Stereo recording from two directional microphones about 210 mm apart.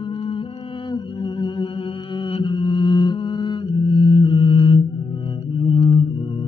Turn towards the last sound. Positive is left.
turn(degrees=25)  # may be behind; listen again after turning